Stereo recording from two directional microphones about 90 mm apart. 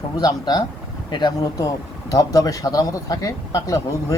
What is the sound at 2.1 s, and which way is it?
Speech, 40° left (ahead or behind).